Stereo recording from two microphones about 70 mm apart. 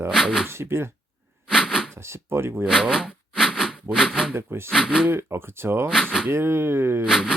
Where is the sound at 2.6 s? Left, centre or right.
Centre.